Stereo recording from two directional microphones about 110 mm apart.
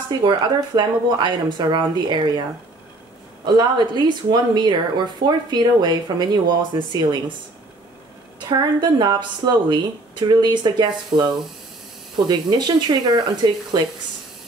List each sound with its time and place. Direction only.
0.2 s speech: 45° right (ahead or behind)
3.4 s speech: 40° right (ahead or behind)
8.5 s a woman's voice: 40° right (ahead or behind)
12.3 s a woman's voice: 40° right (ahead or behind)